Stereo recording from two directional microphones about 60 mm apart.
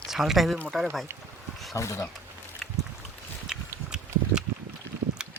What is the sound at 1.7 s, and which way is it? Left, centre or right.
Speech, left.